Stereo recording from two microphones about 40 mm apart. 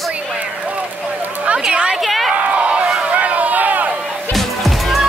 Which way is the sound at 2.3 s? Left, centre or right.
Right.